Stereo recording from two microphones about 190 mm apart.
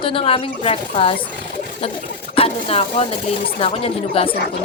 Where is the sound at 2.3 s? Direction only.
30° left (ahead or behind).